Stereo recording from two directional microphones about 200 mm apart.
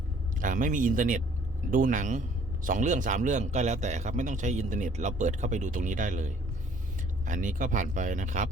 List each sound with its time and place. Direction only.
0.3 s a man's voice: 40° right (ahead or behind)